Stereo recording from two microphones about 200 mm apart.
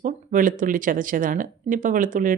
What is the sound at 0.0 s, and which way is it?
Speech, 40° right (ahead or behind).